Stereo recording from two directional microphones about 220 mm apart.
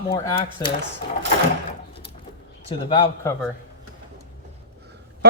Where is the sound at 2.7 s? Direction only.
20° left (ahead or behind).